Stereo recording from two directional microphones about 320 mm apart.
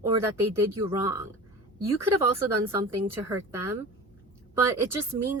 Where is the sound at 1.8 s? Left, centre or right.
Centre.